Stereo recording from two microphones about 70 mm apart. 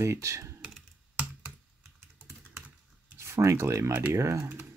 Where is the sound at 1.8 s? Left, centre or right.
Right.